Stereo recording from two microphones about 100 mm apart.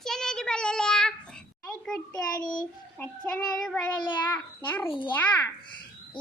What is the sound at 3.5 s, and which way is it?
Child singing, 5° left (ahead or behind).